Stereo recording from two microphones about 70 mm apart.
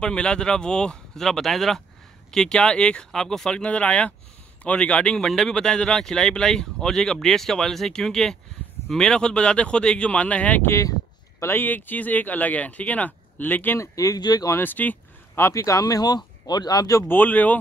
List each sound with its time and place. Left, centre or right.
0.0 s speech: centre
11.3 s speech: left
13.7 s speech: left
14.2 s speech: left
14.6 s speech: left
15.3 s speech: left
17.1 s speech: left